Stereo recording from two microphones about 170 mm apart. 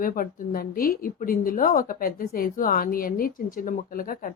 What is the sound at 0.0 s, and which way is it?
A woman's voice, 55° left (ahead or behind).